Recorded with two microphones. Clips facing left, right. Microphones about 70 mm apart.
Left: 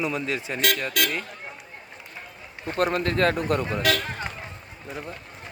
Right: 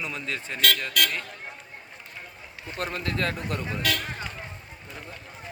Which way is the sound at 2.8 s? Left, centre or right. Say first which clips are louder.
Left 7 dB; left.